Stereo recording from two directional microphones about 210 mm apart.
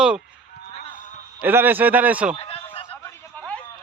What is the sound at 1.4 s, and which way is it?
Speech, 10° right (ahead or behind).